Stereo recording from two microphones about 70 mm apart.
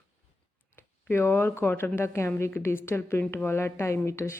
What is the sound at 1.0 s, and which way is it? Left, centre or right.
A woman's voice, left.